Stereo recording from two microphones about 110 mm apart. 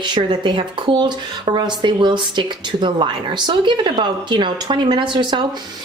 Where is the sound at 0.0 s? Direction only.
45° right (ahead or behind).